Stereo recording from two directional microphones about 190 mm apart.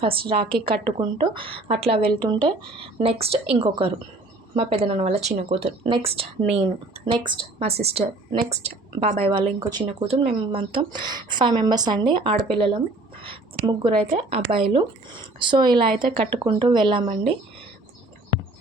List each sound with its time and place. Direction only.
0.0 s speech: 30° right (ahead or behind)